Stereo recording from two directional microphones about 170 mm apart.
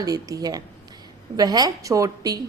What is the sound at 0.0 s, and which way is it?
Speech, 20° right (ahead or behind).